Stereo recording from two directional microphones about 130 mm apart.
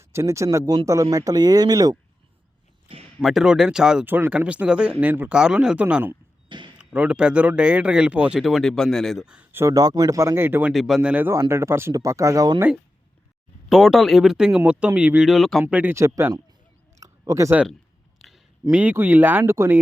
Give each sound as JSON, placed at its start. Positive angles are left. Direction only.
{"t": 0.0, "sound": "speech", "side_deg": -20}
{"t": 3.2, "sound": "speech", "side_deg": 0}
{"t": 4.0, "sound": "a man's voice", "side_deg": -15}
{"t": 10.7, "sound": "speech", "side_deg": 0}
{"t": 13.7, "sound": "a man's voice", "side_deg": 0}
{"t": 15.6, "sound": "a man's voice", "side_deg": -15}
{"t": 17.0, "sound": "a sound", "side_deg": -25}
{"t": 18.2, "sound": "a sound", "side_deg": 0}
{"t": 18.7, "sound": "a man's voice", "side_deg": -10}